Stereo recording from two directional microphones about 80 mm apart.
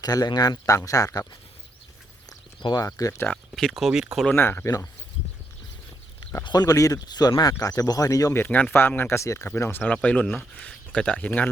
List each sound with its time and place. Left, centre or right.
0.0 s speech: left
0.7 s speech: left
2.7 s speech: left
3.2 s speech: centre
4.4 s speech: left
6.4 s speech: left
8.3 s speech: left
9.9 s speech: centre